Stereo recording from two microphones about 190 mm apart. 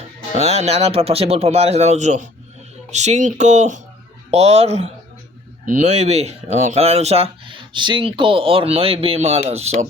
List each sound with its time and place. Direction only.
0.3 s speech: 35° right (ahead or behind)